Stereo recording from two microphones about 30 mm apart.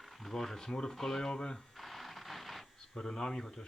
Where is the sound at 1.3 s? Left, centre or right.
Left.